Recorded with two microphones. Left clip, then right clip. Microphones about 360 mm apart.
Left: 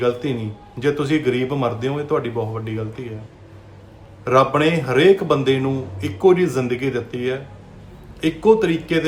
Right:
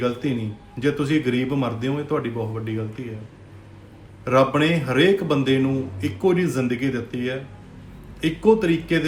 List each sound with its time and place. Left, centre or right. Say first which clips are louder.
0.0 s a man's voice: left 4 dB; centre
4.2 s a man's voice: left 3 dB; centre